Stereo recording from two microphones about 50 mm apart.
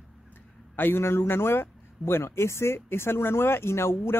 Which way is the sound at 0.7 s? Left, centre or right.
Left.